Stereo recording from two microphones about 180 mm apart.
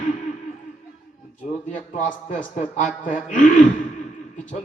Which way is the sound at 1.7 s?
45° left (ahead or behind).